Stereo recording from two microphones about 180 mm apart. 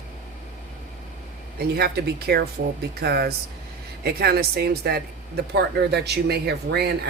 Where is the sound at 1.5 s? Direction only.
60° right (ahead or behind).